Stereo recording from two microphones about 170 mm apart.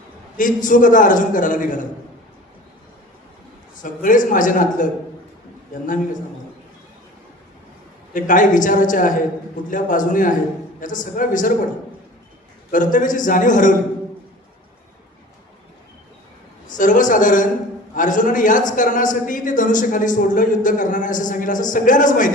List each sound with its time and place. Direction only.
0.3 s a man's voice: 50° left (ahead or behind)
3.8 s a man's voice: 50° left (ahead or behind)
8.1 s a man's voice: 50° left (ahead or behind)
12.7 s a man's voice: 50° left (ahead or behind)
16.6 s a man's voice: 50° left (ahead or behind)